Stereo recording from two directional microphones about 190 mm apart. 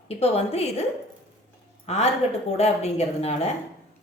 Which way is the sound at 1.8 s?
35° left (ahead or behind).